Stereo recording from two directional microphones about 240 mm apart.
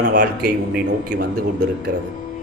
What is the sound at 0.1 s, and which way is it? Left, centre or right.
Speech, right.